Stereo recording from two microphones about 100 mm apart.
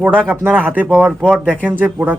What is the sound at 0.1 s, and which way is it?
Speech, 10° left (ahead or behind).